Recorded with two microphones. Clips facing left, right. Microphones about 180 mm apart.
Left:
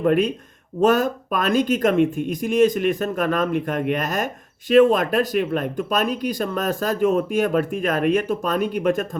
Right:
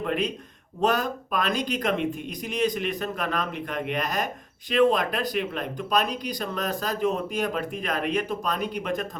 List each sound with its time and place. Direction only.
0.0 s speech: 45° left (ahead or behind)